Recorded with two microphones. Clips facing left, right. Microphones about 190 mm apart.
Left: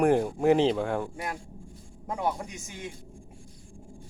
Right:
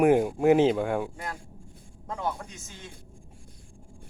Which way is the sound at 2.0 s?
15° left (ahead or behind).